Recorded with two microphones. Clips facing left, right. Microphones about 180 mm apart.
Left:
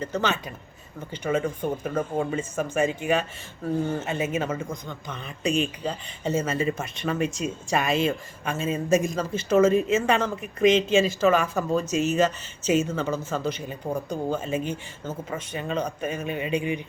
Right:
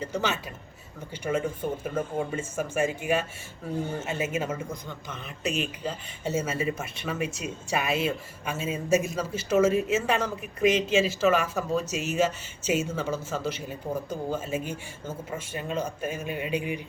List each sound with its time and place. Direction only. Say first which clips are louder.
0.0 s speech: left 3 dB; 10° right (ahead or behind)